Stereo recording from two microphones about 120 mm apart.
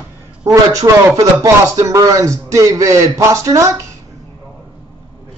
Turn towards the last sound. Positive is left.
turn(degrees=-25)  # may be behind; listen again after turning